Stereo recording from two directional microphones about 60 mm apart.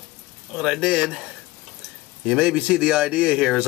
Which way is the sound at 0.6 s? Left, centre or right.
Right.